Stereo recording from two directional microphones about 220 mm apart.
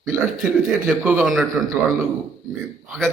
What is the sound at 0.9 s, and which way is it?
Speech, 5° right (ahead or behind).